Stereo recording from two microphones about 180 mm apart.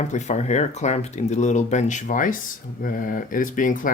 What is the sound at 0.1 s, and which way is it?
Speech, 40° left (ahead or behind).